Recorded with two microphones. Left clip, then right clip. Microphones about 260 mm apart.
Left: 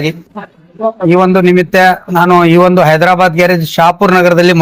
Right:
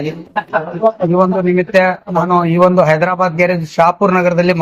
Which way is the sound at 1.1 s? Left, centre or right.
Left.